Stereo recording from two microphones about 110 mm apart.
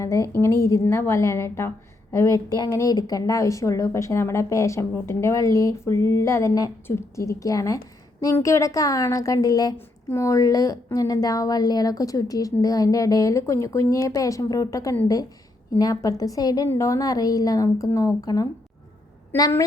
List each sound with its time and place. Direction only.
0.0 s a woman's voice: 30° left (ahead or behind)